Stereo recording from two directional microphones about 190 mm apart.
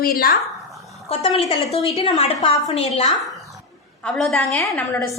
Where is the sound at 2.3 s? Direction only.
15° left (ahead or behind).